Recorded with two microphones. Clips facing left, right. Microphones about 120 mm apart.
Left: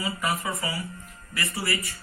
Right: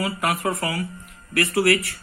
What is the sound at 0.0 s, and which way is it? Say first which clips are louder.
Speech: right 5 dB; 70° right (ahead or behind).